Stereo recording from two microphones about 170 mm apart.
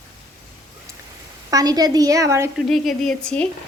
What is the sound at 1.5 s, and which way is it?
Speech, 20° right (ahead or behind).